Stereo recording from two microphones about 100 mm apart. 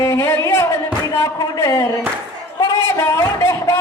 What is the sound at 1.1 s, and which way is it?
Speech, 30° left (ahead or behind).